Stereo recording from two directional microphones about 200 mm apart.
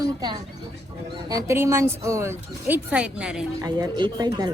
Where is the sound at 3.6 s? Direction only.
20° right (ahead or behind).